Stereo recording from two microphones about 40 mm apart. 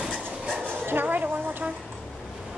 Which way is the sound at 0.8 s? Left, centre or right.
Right.